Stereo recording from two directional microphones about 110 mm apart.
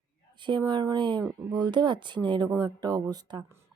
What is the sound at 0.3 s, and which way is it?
A woman's voice, 45° right (ahead or behind).